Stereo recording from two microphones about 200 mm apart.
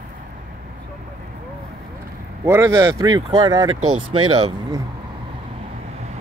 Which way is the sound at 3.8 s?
90° right.